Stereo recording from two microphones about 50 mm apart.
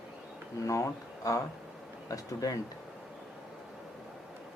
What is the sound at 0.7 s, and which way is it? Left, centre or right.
Speech, left.